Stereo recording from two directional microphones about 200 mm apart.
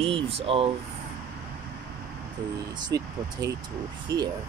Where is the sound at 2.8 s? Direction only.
20° right (ahead or behind).